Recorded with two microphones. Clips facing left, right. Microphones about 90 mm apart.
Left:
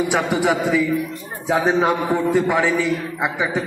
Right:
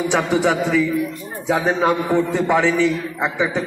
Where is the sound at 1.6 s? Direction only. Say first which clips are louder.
Left 3 dB; 20° left (ahead or behind).